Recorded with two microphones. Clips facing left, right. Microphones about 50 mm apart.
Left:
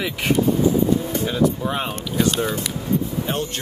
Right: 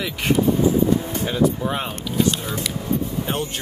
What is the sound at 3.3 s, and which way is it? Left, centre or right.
Speech, centre.